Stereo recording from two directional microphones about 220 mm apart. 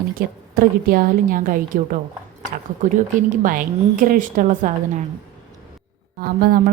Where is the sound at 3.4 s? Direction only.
40° right (ahead or behind).